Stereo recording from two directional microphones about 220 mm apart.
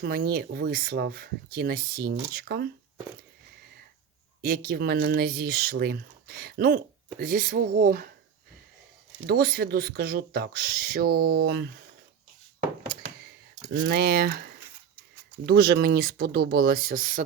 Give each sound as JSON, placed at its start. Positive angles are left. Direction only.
{"t": 0.0, "sound": "speech", "side_deg": -45}
{"t": 4.4, "sound": "speech", "side_deg": -40}
{"t": 9.2, "sound": "speech", "side_deg": -45}
{"t": 13.8, "sound": "speech", "side_deg": -45}